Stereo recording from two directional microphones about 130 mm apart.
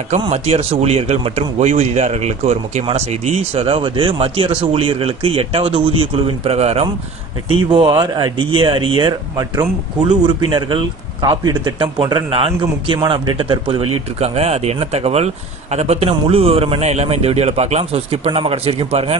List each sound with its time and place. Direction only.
0.3 s speech: 50° right (ahead or behind)
7.7 s speech: 40° right (ahead or behind)